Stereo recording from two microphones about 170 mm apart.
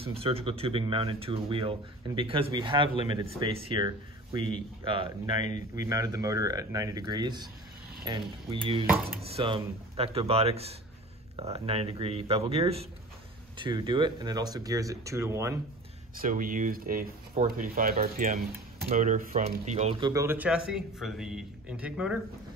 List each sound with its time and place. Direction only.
0.0 s speech: 35° right (ahead or behind); by 15.5 s 15° right (ahead or behind)
16.2 s speech: 55° right (ahead or behind)
20.0 s a man's voice: 20° right (ahead or behind)